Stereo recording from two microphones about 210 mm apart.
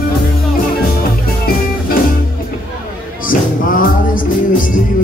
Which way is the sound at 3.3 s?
40° left (ahead or behind).